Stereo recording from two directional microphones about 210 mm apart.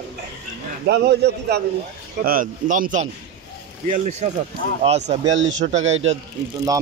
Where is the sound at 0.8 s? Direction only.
50° right (ahead or behind).